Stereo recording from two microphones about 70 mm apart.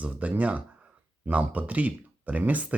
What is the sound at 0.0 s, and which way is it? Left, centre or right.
Speech, centre.